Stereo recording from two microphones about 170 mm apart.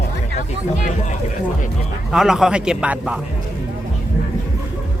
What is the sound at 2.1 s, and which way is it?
A man's voice, centre (ahead or behind).